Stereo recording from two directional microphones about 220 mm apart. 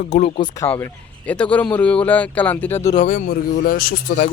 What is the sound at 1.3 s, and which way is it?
Speech, 5° left (ahead or behind).